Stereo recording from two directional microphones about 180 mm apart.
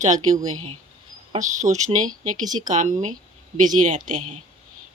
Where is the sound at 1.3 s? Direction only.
45° right (ahead or behind).